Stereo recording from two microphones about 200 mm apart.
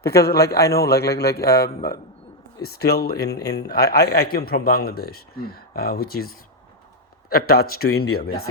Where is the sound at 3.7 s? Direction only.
50° left (ahead or behind).